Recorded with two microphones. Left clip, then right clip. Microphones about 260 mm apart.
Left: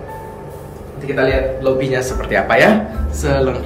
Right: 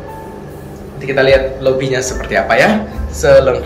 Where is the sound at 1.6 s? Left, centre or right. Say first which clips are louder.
Right 2 dB; centre.